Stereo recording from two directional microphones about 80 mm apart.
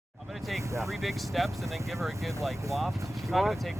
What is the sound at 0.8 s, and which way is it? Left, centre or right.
Speech, centre.